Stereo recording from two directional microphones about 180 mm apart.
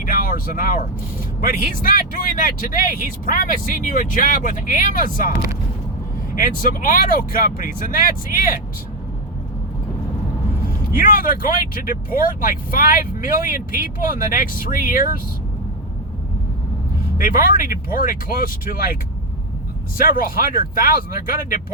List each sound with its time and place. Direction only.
0.0 s speech: 50° left (ahead or behind)
6.3 s speech: 50° left (ahead or behind)
10.7 s speech: 50° left (ahead or behind)
17.2 s speech: 50° left (ahead or behind)
20.0 s speech: 50° left (ahead or behind)